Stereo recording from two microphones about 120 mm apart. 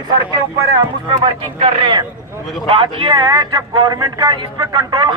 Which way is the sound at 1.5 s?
55° right (ahead or behind).